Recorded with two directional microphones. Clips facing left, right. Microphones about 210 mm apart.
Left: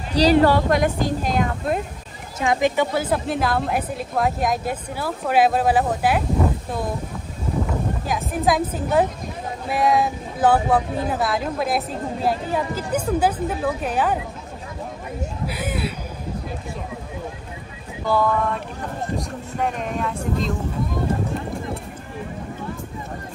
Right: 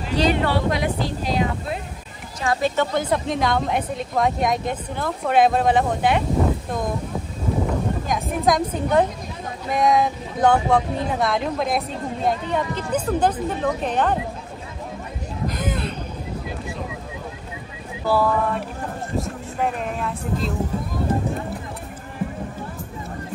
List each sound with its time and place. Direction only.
0.1 s speech: 35° left (ahead or behind)
2.4 s speech: 15° left (ahead or behind)
8.1 s speech: 5° left (ahead or behind)
15.4 s a sound: 10° left (ahead or behind)
18.0 s speech: 5° right (ahead or behind)